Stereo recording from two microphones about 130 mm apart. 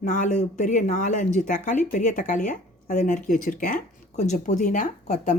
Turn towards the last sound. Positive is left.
turn(degrees=75)  # may be behind; listen again after turning